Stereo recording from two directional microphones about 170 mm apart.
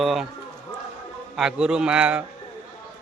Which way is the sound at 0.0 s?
Centre (ahead or behind).